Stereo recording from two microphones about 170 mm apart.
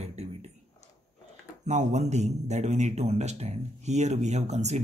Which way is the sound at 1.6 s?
40° right (ahead or behind).